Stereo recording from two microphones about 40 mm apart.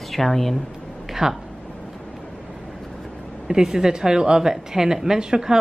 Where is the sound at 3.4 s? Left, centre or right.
Centre.